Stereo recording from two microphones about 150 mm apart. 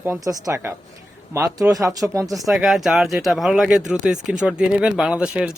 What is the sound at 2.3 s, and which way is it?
Speech, centre (ahead or behind).